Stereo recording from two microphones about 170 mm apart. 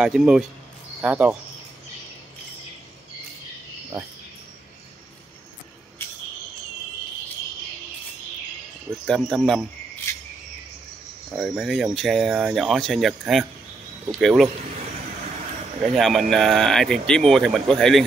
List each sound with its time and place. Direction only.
0.0 s speech: 5° right (ahead or behind)
9.0 s speech: 5° left (ahead or behind)
11.3 s speech: 5° right (ahead or behind)
15.9 s speech: centre (ahead or behind)